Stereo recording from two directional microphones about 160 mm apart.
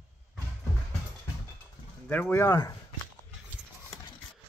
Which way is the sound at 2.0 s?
10° left (ahead or behind).